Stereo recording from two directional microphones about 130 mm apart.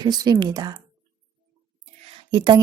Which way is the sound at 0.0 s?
30° right (ahead or behind).